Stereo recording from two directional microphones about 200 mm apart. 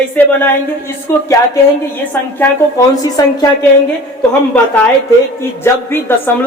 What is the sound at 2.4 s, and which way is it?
A man's voice, 15° left (ahead or behind).